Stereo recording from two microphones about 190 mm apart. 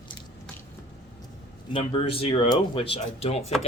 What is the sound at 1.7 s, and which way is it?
Speech, 30° left (ahead or behind).